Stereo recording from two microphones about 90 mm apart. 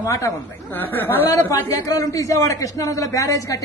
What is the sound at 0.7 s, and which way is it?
Speech, 25° left (ahead or behind).